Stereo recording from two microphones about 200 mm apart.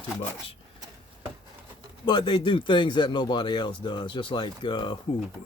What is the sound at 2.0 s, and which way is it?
Speech, 20° left (ahead or behind).